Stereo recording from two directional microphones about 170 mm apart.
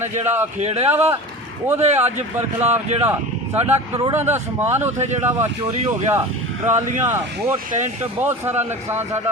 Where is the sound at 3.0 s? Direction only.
10° right (ahead or behind).